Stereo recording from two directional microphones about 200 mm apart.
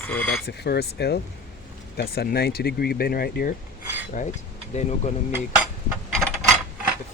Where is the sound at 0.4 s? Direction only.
55° left (ahead or behind).